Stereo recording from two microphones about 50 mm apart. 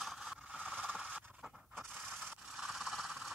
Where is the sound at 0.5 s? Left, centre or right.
Right.